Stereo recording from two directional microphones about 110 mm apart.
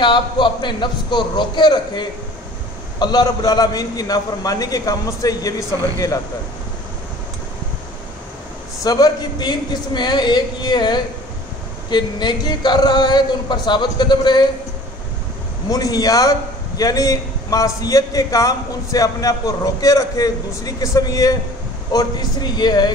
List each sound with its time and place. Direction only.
0.0 s a man's voice: 45° left (ahead or behind)
8.8 s a man's voice: 35° left (ahead or behind)
15.7 s a man's voice: 35° left (ahead or behind)